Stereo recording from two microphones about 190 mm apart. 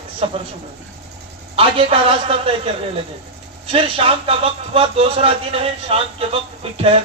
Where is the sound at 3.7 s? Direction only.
30° right (ahead or behind).